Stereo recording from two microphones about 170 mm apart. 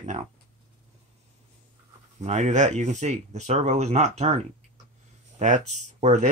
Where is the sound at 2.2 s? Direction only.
40° right (ahead or behind).